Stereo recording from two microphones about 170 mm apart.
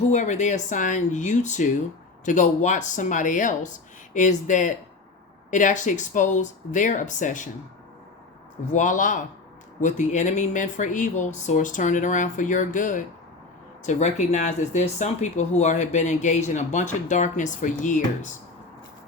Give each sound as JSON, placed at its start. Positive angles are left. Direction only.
{"t": 0.1, "sound": "speech", "side_deg": 45}
{"t": 8.7, "sound": "speech", "side_deg": 50}